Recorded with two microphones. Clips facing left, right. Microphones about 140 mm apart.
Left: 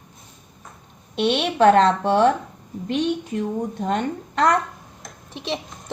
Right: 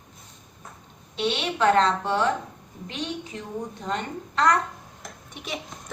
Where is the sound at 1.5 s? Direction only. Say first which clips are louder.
Left 6 dB; 45° left (ahead or behind).